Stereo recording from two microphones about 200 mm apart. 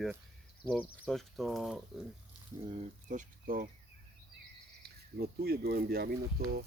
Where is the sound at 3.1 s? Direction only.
40° right (ahead or behind).